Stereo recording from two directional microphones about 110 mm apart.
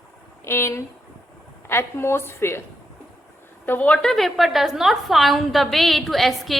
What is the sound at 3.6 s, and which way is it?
A woman's voice, 15° left (ahead or behind).